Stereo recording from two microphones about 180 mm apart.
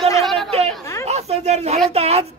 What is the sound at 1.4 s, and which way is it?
Speech, 35° right (ahead or behind).